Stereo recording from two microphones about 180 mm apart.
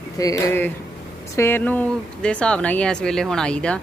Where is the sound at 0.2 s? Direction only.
20° left (ahead or behind).